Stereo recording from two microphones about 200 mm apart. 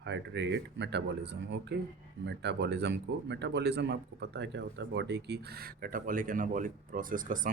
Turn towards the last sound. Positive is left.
turn(degrees=-45)  # may be behind; listen again after turning